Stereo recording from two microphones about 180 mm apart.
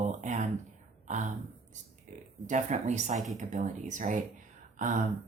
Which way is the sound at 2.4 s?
40° right (ahead or behind).